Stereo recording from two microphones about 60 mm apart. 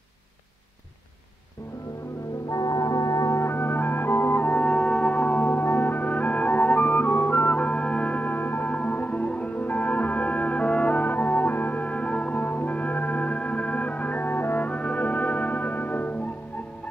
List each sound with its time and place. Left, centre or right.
2.5 s music: left
3.3 s music: left